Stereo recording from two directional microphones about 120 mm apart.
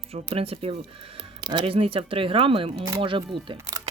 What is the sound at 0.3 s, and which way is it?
Speech, 55° right (ahead or behind).